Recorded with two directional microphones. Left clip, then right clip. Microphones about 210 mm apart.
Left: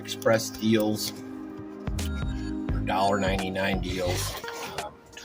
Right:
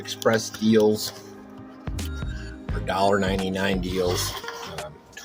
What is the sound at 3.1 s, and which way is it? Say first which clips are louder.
Speech: right 3 dB; 45° right (ahead or behind).